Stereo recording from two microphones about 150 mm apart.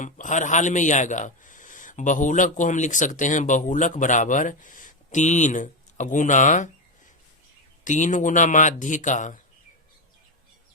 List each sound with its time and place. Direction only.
0.0 s a man's voice: 55° left (ahead or behind)
7.9 s a man's voice: 55° left (ahead or behind)